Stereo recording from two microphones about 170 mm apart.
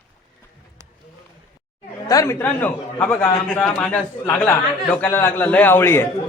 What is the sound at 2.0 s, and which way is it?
Speech, 20° left (ahead or behind).